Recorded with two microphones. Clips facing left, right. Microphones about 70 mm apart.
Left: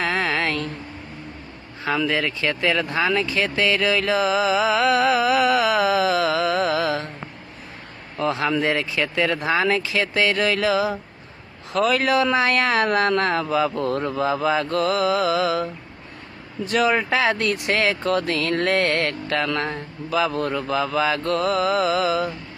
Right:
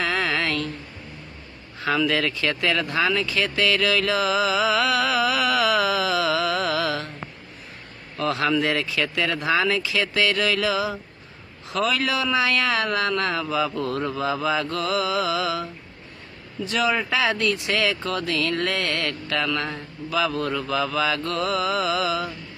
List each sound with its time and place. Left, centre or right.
0.0 s a sound: left
2.0 s speech: left
3.3 s music: left
8.2 s speech: left